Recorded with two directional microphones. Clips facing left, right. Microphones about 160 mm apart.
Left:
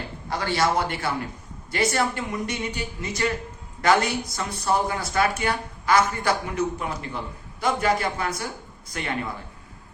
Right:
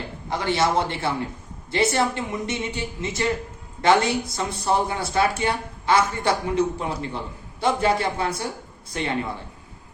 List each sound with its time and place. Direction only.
0.3 s speech: 20° right (ahead or behind)